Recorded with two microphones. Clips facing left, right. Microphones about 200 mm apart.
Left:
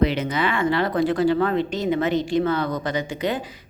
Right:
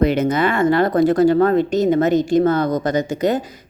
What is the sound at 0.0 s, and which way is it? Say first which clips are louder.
A woman's voice: right 5 dB; 45° right (ahead or behind).